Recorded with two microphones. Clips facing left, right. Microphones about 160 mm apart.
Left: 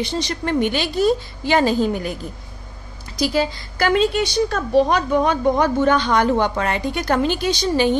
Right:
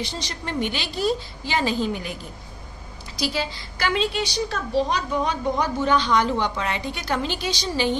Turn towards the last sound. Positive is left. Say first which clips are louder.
# left 6 dB
turn(degrees=55)  # may be behind; listen again after turning